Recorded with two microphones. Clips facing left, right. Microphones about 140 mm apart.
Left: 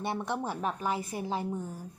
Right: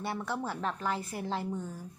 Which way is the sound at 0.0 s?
20° left (ahead or behind).